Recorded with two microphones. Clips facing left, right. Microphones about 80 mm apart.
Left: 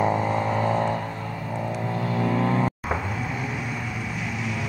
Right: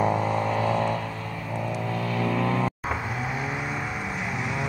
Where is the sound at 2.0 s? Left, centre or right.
Left.